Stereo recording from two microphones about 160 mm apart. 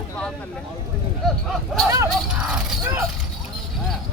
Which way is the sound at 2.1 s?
5° right (ahead or behind).